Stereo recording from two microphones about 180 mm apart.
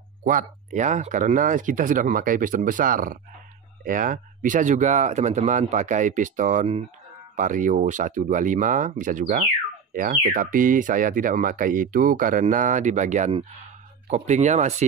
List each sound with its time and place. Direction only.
0.2 s speech: 45° right (ahead or behind)